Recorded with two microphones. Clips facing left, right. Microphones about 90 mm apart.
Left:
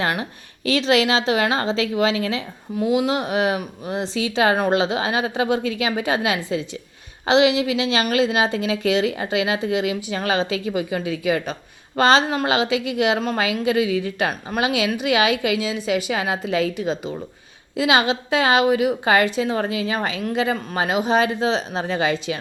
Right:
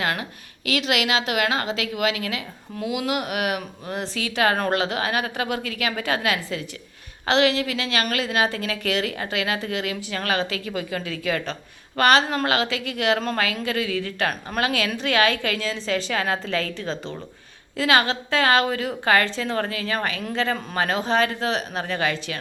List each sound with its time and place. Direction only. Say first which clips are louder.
0.0 s a woman's voice: left 3 dB; 30° left (ahead or behind)